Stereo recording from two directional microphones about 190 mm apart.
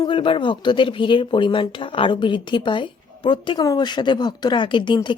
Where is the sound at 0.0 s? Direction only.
25° left (ahead or behind).